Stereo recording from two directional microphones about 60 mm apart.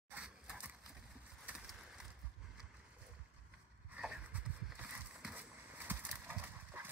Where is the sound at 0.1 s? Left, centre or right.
Right.